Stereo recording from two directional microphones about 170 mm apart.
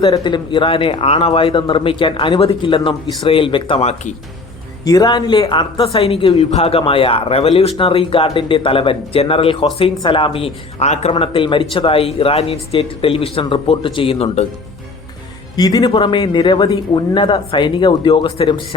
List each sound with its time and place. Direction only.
0.0 s speech: 25° left (ahead or behind)
4.9 s speech: 20° left (ahead or behind)
15.5 s a man's voice: 25° left (ahead or behind)